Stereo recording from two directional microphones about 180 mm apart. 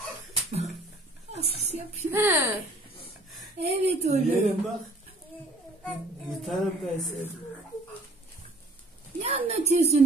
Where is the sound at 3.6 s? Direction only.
35° right (ahead or behind).